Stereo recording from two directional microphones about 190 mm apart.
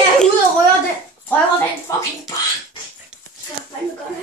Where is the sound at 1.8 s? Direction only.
20° left (ahead or behind).